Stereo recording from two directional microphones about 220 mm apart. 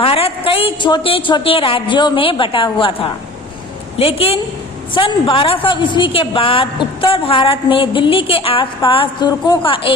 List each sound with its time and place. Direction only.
0.0 s a woman's voice: 25° left (ahead or behind)